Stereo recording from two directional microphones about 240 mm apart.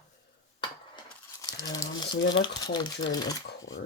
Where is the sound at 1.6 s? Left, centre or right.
Centre.